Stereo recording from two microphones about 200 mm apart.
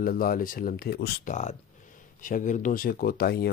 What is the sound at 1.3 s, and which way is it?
Speech, 35° left (ahead or behind).